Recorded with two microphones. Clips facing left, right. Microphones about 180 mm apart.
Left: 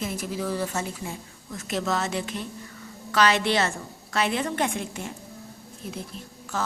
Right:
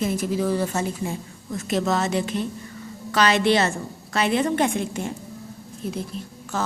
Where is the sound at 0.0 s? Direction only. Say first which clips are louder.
Right 7 dB; 35° right (ahead or behind).